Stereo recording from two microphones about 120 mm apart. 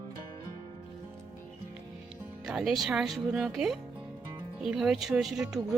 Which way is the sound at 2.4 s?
5° right (ahead or behind).